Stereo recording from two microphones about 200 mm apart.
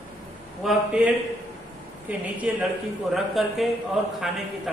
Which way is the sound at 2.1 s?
5° right (ahead or behind).